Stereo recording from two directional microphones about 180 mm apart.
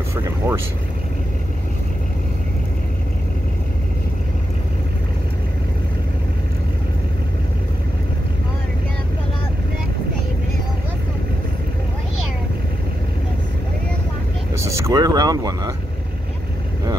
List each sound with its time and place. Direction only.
0.4 s speech: 15° right (ahead or behind)
14.6 s vehicle: 20° right (ahead or behind)